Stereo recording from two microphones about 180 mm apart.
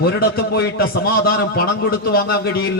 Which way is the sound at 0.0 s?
60° left (ahead or behind).